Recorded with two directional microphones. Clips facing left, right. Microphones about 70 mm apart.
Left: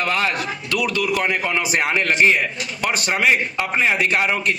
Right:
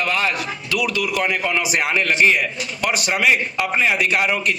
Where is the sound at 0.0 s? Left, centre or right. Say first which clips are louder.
Even; left.